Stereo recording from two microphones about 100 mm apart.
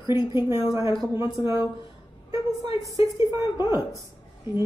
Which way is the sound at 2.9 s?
35° right (ahead or behind).